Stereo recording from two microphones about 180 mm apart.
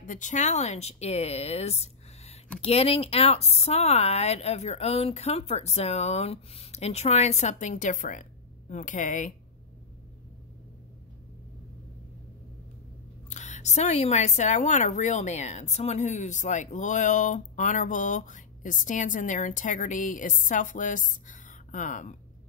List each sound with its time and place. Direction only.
0.0 s speech: 45° left (ahead or behind)
13.3 s speech: 40° left (ahead or behind)